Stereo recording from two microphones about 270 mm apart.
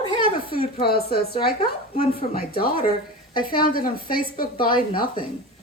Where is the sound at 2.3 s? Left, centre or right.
Left.